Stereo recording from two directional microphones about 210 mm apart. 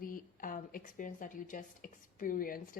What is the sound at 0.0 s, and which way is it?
A woman's voice, 40° left (ahead or behind).